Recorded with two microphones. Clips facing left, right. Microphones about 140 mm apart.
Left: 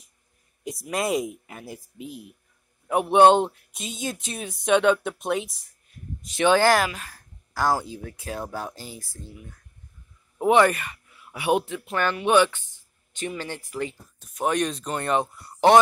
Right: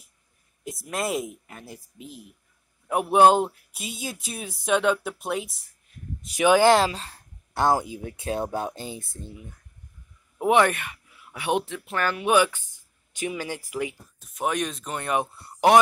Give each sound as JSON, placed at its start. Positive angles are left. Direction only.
{"t": 0.7, "sound": "speech", "side_deg": 0}
{"t": 6.6, "sound": "speech", "side_deg": -25}
{"t": 10.4, "sound": "speech", "side_deg": 0}